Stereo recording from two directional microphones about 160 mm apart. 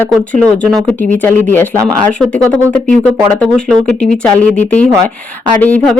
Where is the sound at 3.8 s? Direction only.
5° left (ahead or behind).